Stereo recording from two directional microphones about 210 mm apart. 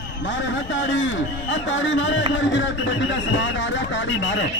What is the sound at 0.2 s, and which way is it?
Speech, 60° left (ahead or behind).